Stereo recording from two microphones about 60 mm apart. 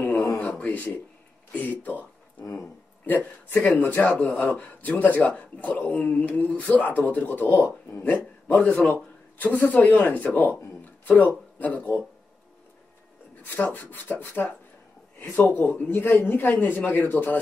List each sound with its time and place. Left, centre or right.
0.0 s a sound: left
0.4 s a sound: left
1.5 s speech: left
3.1 s speech: left
11.6 s speech: left
13.4 s speech: left